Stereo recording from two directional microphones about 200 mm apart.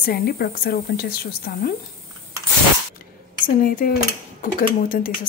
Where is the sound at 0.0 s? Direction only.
50° left (ahead or behind).